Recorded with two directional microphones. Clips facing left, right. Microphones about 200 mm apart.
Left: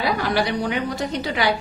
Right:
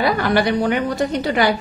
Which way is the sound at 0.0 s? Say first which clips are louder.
Right 4 dB; 55° right (ahead or behind).